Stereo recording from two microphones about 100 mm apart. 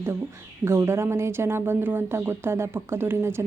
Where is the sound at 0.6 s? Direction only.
25° right (ahead or behind).